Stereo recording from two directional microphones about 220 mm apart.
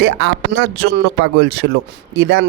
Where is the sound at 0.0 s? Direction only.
50° right (ahead or behind).